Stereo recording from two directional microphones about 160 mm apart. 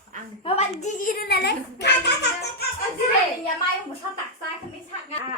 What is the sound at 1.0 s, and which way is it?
Speech, 85° left.